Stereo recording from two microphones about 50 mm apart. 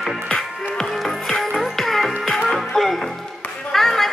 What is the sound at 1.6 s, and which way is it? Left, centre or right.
Music, centre.